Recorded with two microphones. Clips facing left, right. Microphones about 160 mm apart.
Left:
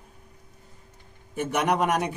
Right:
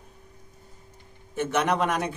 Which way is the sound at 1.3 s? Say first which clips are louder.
Even; 10° left (ahead or behind).